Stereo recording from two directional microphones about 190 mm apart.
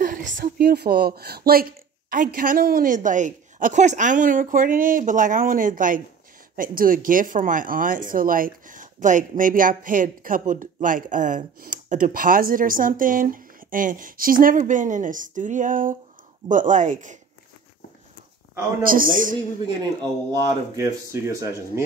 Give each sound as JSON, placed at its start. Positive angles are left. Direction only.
{"t": 0.0, "sound": "speech", "side_deg": -45}
{"t": 18.8, "sound": "speech", "side_deg": -50}
{"t": 20.2, "sound": "speech", "side_deg": -20}